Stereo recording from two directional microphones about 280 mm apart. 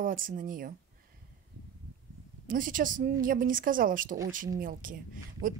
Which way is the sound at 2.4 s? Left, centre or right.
Right.